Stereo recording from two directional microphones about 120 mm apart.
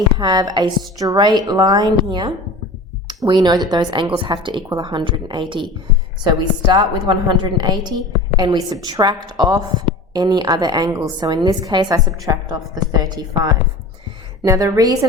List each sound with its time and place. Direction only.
0.2 s a woman's voice: 35° right (ahead or behind)